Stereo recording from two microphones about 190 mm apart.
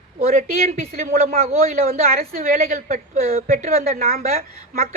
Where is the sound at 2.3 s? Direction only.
45° right (ahead or behind).